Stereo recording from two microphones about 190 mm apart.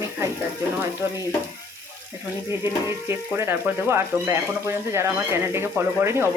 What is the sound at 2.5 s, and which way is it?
Speech, 10° right (ahead or behind).